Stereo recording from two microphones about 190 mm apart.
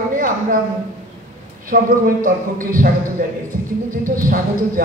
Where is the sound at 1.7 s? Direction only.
45° right (ahead or behind).